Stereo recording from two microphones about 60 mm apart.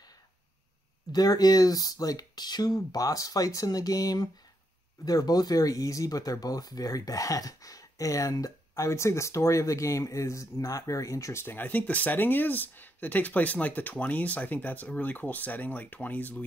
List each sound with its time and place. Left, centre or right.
1.1 s speech: left
11.4 s speech: left